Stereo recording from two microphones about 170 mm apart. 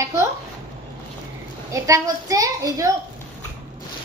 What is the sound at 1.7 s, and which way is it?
A woman's voice, 20° right (ahead or behind).